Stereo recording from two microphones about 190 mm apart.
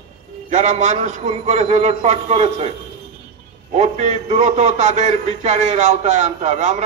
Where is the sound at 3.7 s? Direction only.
35° right (ahead or behind).